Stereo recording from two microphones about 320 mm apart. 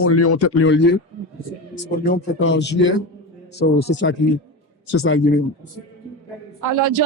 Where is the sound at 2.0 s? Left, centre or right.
Left.